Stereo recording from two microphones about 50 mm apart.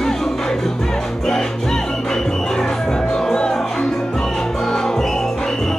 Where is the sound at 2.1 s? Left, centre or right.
Centre.